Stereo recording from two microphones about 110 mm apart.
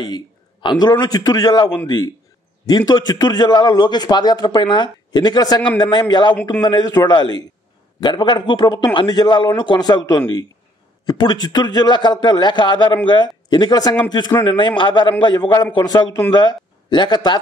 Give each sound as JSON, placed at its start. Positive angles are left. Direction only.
{"t": 0.0, "sound": "a man's voice", "side_deg": 45}
{"t": 14.4, "sound": "a man's voice", "side_deg": 50}